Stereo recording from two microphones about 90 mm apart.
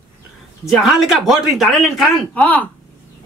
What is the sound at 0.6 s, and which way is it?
Speech, centre (ahead or behind).